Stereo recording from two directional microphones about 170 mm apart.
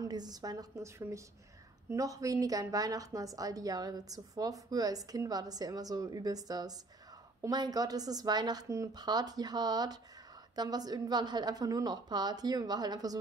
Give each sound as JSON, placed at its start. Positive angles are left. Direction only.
{"t": 0.0, "sound": "a woman's voice", "side_deg": -25}